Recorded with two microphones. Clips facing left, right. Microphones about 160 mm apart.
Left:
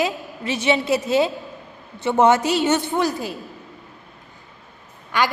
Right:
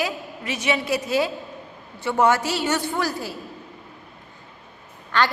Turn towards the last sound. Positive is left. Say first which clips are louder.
# left 1 dB
turn(degrees=10)  # may be behind; listen again after turning